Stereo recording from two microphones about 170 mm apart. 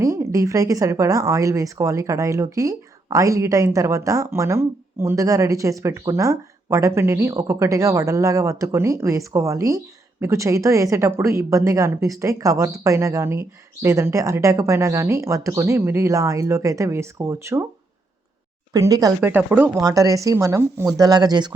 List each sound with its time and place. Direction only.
0.0 s speech: 20° right (ahead or behind)
18.7 s speech: 20° right (ahead or behind)
19.8 s speech: 20° right (ahead or behind)